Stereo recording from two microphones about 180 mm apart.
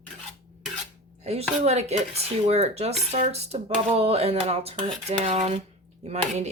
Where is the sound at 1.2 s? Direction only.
35° right (ahead or behind).